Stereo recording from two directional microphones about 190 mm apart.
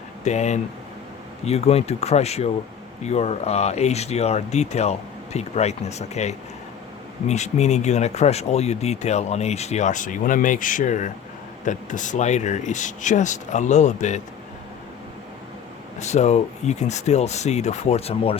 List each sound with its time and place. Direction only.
0.3 s speech: 35° left (ahead or behind)
16.0 s speech: 35° left (ahead or behind)